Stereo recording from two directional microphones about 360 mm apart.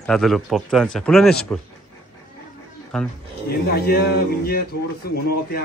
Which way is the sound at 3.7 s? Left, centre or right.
Left.